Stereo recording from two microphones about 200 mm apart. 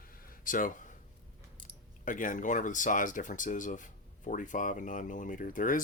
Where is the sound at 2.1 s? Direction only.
40° left (ahead or behind).